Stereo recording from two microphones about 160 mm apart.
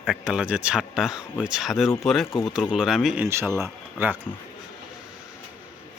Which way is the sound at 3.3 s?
15° right (ahead or behind).